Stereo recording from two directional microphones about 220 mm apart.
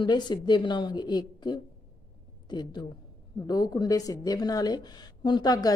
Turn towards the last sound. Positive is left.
turn(degrees=15)  # may be behind; listen again after turning